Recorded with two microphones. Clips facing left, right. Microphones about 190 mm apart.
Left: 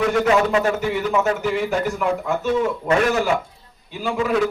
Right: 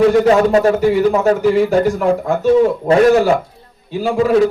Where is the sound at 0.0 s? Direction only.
35° right (ahead or behind).